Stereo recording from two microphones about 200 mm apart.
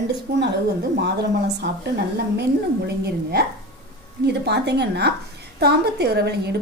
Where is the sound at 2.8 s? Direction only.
55° right (ahead or behind).